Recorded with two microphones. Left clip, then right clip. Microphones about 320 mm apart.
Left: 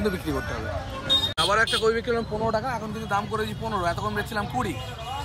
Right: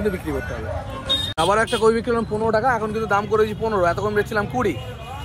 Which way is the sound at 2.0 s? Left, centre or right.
Right.